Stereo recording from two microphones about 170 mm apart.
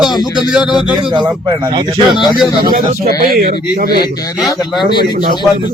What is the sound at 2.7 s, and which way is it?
A man's voice, 60° right (ahead or behind).